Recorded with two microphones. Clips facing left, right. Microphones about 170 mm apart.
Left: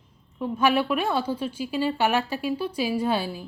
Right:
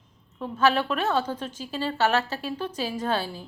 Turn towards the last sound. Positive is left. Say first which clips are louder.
# left 3 dB
turn(degrees=10)  # may be behind; listen again after turning